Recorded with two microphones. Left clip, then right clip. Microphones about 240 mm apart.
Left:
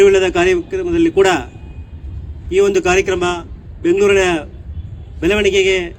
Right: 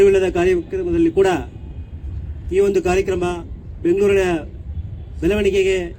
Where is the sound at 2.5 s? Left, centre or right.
Left.